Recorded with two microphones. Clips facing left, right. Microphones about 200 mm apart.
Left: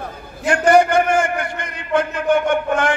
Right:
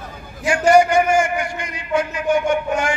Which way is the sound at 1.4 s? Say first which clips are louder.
Even; 55° left (ahead or behind).